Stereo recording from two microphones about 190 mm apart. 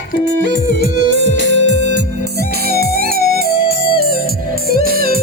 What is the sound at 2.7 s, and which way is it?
Music, 50° right (ahead or behind).